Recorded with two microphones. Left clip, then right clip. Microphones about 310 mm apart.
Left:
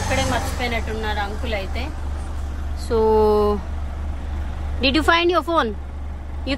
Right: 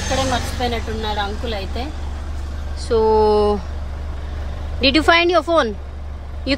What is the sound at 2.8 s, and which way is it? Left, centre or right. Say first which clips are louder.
Speech: right 2 dB; centre.